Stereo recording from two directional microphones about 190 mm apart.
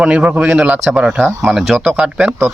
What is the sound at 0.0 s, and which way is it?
Speech, 5° right (ahead or behind).